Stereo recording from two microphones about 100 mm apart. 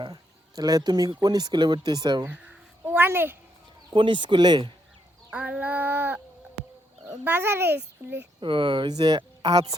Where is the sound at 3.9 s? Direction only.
55° right (ahead or behind).